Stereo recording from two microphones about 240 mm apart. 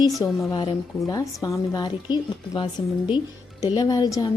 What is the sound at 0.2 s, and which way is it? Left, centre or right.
A woman's voice, centre.